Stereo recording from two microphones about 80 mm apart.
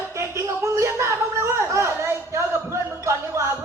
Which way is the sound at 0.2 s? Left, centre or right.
Right.